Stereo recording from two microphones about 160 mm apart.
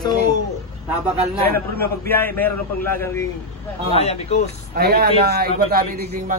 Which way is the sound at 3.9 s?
40° left (ahead or behind).